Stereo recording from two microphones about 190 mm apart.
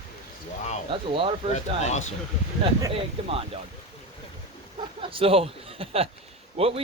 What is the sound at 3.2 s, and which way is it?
Speech, 30° right (ahead or behind).